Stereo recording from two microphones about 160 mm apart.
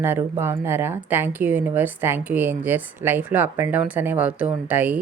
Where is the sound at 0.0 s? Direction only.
15° right (ahead or behind).